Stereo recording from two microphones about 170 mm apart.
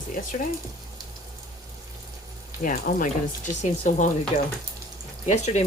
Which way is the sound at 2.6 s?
55° left (ahead or behind).